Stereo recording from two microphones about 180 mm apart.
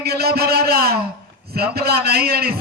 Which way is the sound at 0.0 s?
60° right (ahead or behind).